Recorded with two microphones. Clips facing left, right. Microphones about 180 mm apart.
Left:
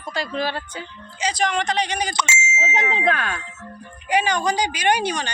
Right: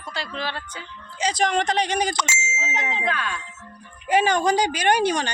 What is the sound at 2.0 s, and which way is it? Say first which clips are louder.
Ding: left 1 dB; 50° right (ahead or behind).